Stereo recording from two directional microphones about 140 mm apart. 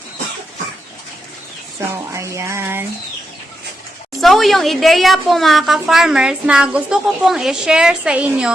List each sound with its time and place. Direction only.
2.1 s music: 20° right (ahead or behind)
4.2 s a woman's voice: centre (ahead or behind)